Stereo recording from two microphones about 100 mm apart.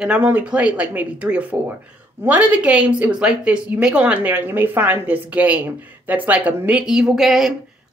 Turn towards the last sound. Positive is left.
turn(degrees=0)  # may be behind; listen again after turning